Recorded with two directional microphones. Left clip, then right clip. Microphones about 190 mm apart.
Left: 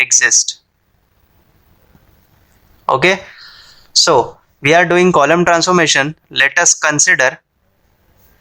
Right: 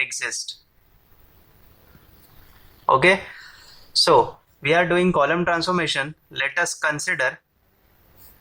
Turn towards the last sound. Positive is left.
turn(degrees=40)  # may be behind; listen again after turning